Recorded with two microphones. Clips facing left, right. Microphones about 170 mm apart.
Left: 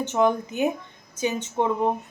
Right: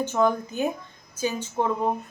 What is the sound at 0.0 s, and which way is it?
Speech, 20° left (ahead or behind).